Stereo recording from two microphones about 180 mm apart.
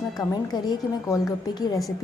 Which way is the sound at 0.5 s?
25° left (ahead or behind).